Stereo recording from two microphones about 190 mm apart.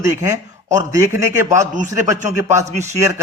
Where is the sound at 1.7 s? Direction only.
40° right (ahead or behind).